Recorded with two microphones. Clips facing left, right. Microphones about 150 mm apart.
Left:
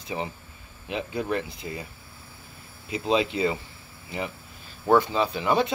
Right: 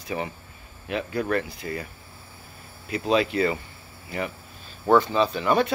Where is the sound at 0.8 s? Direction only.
20° left (ahead or behind).